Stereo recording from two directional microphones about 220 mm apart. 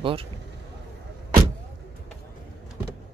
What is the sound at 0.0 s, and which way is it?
Speech, 25° right (ahead or behind).